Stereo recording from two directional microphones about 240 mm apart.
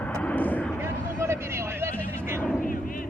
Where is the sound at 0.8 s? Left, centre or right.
Centre.